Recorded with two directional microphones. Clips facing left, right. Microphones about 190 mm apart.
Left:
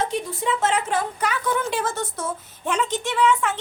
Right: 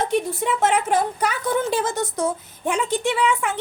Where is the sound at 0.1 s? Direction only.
60° right (ahead or behind).